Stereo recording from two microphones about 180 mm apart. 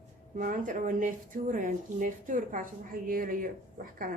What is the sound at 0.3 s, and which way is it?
Speech, 50° right (ahead or behind).